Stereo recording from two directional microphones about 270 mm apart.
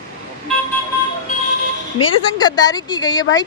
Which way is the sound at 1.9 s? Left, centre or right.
Centre.